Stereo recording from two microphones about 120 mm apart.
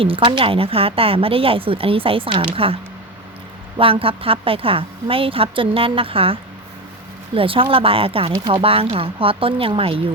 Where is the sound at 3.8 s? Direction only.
50° right (ahead or behind).